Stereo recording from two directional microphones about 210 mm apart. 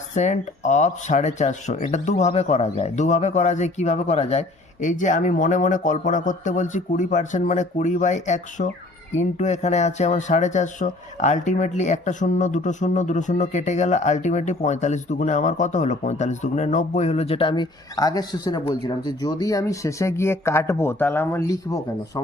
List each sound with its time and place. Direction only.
0.2 s speech: 35° left (ahead or behind); by 22.2 s 15° left (ahead or behind)